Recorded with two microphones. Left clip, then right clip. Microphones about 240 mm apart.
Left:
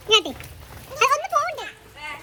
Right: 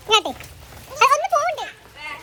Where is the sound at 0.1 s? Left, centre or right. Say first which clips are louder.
Right 1 dB; right.